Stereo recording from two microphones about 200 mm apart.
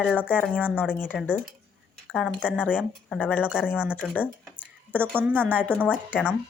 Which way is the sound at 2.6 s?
10° left (ahead or behind).